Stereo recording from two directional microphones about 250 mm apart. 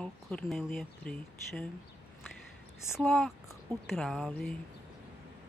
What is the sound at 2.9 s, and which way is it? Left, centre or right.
Speech, centre.